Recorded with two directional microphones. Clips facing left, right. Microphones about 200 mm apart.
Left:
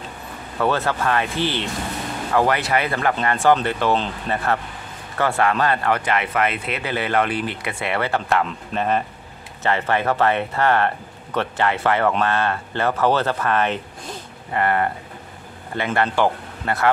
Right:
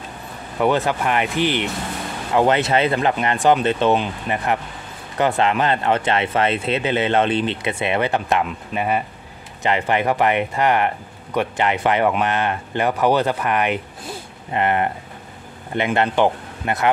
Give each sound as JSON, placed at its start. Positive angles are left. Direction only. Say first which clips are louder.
{"t": 0.6, "sound": "speech", "louder": "right 2 dB", "side_deg": -15}